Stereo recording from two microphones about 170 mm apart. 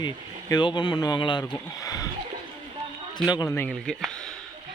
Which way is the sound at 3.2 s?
25° left (ahead or behind).